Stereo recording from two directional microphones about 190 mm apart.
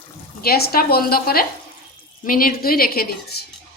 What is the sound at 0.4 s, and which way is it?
A woman's voice, 55° left (ahead or behind).